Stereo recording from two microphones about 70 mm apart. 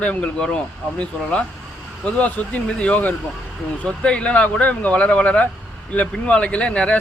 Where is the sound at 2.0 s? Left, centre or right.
Left.